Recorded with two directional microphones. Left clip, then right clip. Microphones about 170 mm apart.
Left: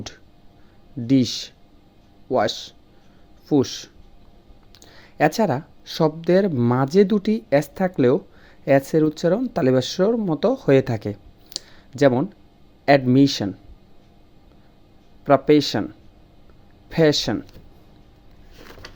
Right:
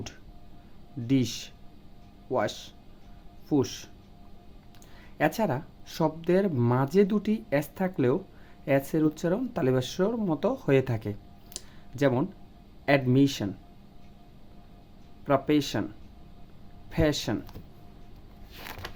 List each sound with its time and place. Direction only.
1.0 s speech: 30° left (ahead or behind)
15.2 s speech: 35° left (ahead or behind)
16.9 s speech: 35° left (ahead or behind)